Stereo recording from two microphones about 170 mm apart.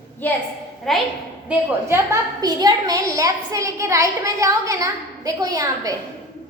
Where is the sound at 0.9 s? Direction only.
Centre (ahead or behind).